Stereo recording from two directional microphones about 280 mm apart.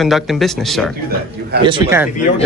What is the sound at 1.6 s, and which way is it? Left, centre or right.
Speech, centre.